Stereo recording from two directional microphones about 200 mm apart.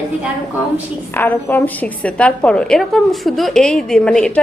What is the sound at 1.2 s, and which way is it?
A woman's voice, 10° left (ahead or behind).